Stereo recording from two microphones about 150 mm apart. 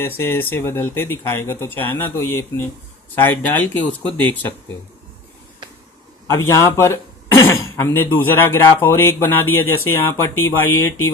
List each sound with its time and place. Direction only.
0.0 s a man's voice: 15° left (ahead or behind)
6.2 s a man's voice: 20° left (ahead or behind)